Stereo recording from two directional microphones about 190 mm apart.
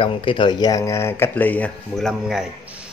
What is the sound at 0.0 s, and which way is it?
Speech, 30° left (ahead or behind).